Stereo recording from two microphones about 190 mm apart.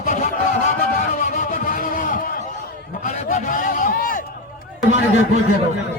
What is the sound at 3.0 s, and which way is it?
A man's voice, 40° left (ahead or behind).